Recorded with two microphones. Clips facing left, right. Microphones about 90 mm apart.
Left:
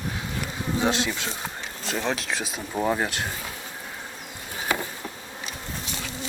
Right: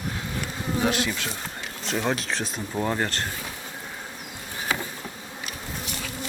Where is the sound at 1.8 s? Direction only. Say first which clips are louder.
Right 1 dB; centre (ahead or behind).